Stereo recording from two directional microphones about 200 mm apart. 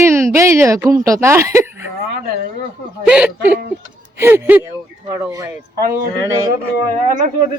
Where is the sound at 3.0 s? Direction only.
5° right (ahead or behind).